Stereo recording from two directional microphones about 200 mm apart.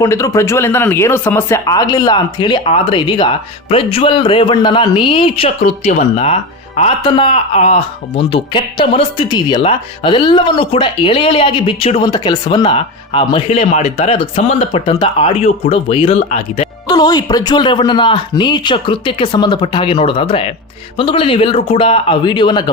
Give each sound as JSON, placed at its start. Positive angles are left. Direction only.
{"t": 0.0, "sound": "speech", "side_deg": 15}
{"t": 16.9, "sound": "speech", "side_deg": 20}